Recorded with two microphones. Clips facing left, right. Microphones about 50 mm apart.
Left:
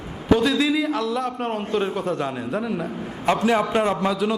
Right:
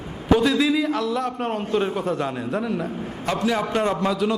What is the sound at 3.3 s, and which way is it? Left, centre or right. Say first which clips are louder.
Speech: left 4 dB; left.